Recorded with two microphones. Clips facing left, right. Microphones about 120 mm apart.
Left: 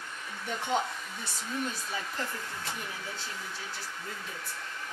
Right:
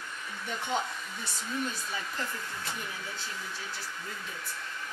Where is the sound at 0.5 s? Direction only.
30° left (ahead or behind).